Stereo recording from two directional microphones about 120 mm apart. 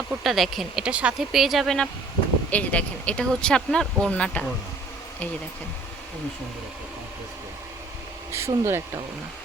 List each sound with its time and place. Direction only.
0.1 s speech: centre (ahead or behind)
8.3 s speech: 20° right (ahead or behind)